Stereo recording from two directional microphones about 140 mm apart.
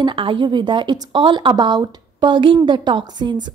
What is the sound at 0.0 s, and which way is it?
A woman's voice, 40° right (ahead or behind).